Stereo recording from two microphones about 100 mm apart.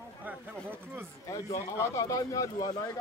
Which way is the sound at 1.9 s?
40° left (ahead or behind).